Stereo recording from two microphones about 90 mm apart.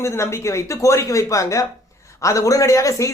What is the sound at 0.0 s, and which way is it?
A man's voice, 30° left (ahead or behind).